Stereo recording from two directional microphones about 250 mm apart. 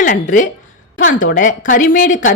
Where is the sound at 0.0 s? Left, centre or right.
Left.